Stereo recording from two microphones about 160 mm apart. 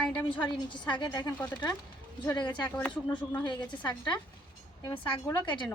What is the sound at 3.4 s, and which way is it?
A woman's voice, 30° left (ahead or behind).